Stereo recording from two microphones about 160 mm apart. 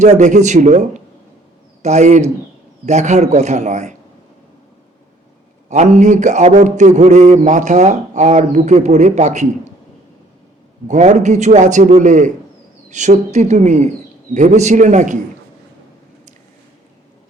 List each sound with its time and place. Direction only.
0.0 s mantra: 50° right (ahead or behind)
5.6 s mantra: 45° right (ahead or behind)
10.8 s mantra: 50° right (ahead or behind)